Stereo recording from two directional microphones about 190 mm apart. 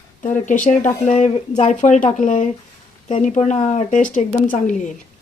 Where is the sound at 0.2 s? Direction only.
40° left (ahead or behind).